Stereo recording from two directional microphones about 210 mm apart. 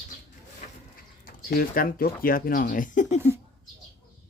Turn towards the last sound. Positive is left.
turn(degrees=35)  # may be behind; listen again after turning